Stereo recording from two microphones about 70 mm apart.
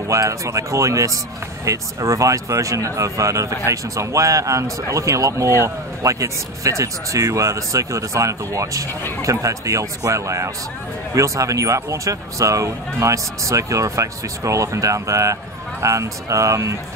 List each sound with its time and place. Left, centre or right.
0.1 s speech: right